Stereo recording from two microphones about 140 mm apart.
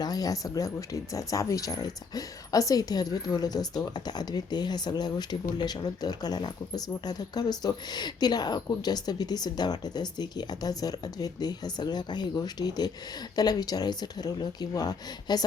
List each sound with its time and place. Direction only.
0.0 s speech: 25° left (ahead or behind)